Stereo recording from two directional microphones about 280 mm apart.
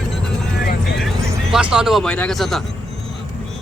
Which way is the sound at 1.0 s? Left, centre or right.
Centre.